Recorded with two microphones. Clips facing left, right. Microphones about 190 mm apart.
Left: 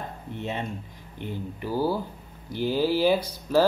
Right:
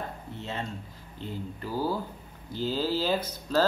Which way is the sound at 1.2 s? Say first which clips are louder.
Left 3 dB; 15° left (ahead or behind).